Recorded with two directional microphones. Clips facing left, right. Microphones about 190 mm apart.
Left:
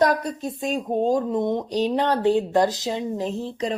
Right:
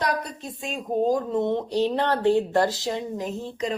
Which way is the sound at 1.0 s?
20° left (ahead or behind).